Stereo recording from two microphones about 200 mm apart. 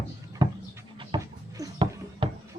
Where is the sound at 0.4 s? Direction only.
20° right (ahead or behind).